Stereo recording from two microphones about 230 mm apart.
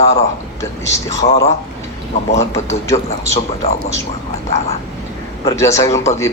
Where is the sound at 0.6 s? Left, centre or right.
Centre.